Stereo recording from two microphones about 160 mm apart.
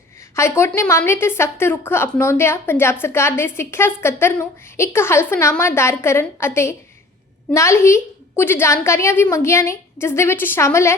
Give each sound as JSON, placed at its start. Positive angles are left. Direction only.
{"t": 0.3, "sound": "a woman's voice", "side_deg": 15}